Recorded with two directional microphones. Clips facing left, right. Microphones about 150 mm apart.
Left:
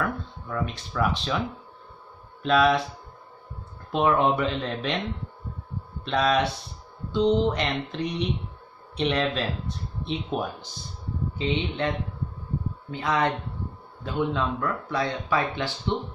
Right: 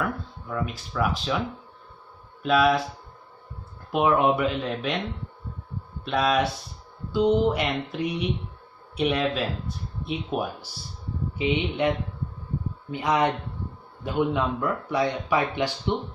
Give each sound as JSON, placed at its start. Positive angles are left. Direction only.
{"t": 0.0, "sound": "speech", "side_deg": -5}
{"t": 2.4, "sound": "speech", "side_deg": -5}
{"t": 3.9, "sound": "speech", "side_deg": -10}
{"t": 6.0, "sound": "speech", "side_deg": -5}
{"t": 12.9, "sound": "speech", "side_deg": -15}